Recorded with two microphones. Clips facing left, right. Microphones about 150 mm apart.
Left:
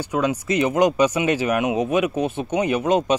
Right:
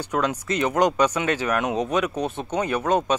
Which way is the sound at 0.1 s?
10° left (ahead or behind).